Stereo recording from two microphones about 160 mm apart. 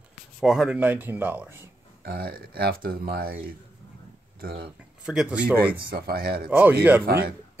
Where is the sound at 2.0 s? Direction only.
70° right (ahead or behind).